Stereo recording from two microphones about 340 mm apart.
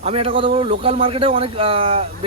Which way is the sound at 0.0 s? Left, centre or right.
Centre.